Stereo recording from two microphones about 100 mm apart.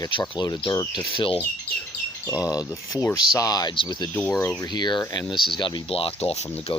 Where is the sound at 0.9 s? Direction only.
55° left (ahead or behind).